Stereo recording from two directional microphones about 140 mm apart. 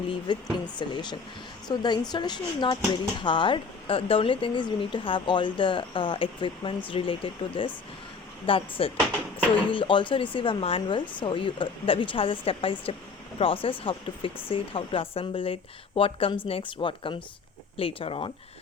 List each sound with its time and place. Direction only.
0.3 s speech: 35° left (ahead or behind)